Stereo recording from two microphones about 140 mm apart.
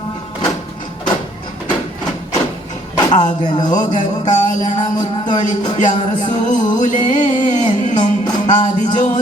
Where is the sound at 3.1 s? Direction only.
60° left (ahead or behind).